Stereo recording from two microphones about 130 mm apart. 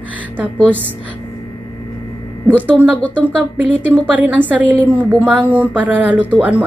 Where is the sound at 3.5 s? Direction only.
10° right (ahead or behind).